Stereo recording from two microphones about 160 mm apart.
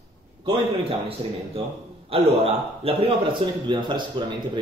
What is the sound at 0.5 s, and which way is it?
Speech, 35° right (ahead or behind).